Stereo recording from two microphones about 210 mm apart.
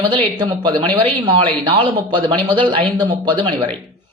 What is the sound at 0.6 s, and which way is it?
Speech, 20° right (ahead or behind).